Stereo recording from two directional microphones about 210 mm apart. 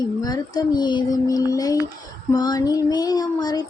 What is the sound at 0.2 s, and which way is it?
Speech, 20° left (ahead or behind).